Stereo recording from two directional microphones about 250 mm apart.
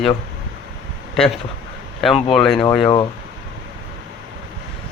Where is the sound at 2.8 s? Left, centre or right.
Centre.